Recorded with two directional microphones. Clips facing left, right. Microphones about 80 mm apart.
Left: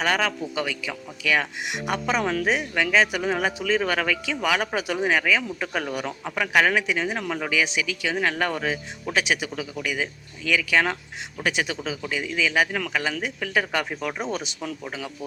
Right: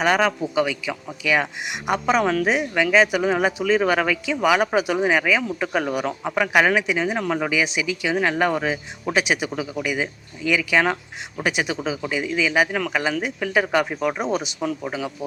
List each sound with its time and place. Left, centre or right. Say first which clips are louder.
0.0 s speech: right 5 dB; centre